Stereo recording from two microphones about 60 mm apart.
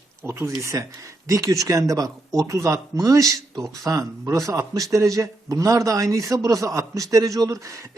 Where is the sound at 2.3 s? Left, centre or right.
Right.